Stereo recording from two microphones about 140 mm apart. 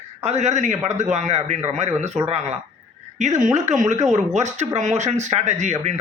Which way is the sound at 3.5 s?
55° right (ahead or behind).